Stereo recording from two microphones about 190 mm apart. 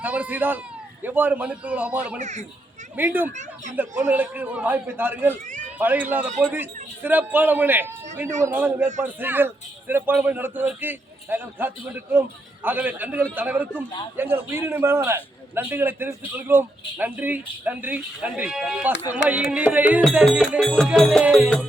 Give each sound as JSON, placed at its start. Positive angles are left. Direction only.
{"t": 0.0, "sound": "a man's voice", "side_deg": -10}
{"t": 2.1, "sound": "a child's voice", "side_deg": -40}
{"t": 2.9, "sound": "a man's voice", "side_deg": -10}
{"t": 20.1, "sound": "music", "side_deg": -5}